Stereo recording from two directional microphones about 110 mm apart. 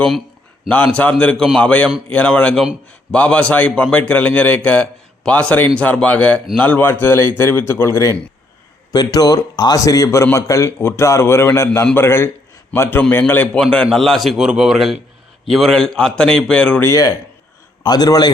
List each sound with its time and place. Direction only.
0.9 s a man's voice: 15° left (ahead or behind)
9.1 s a man's voice: 35° left (ahead or behind); by 16.8 s 10° left (ahead or behind)
16.8 s speech: 30° left (ahead or behind)